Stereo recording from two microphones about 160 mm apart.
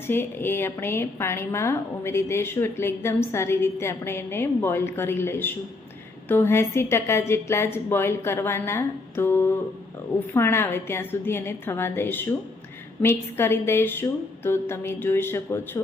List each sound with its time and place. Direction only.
0.1 s a woman's voice: 15° left (ahead or behind)